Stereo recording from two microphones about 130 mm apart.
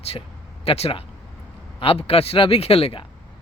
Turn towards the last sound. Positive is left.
turn(degrees=45)  # may be behind; listen again after turning